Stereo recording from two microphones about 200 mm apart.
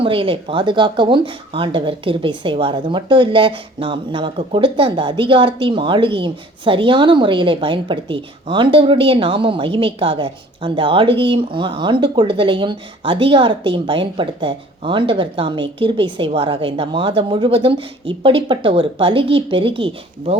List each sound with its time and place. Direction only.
0.0 s speech: 25° right (ahead or behind)